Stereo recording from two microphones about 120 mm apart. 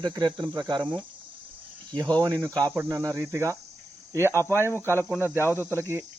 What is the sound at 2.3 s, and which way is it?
Cricket, 25° right (ahead or behind).